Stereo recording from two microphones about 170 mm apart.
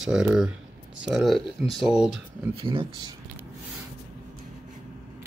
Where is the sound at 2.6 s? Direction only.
30° right (ahead or behind).